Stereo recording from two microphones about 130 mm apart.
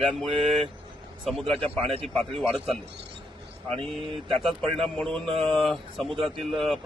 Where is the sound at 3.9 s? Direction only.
Centre (ahead or behind).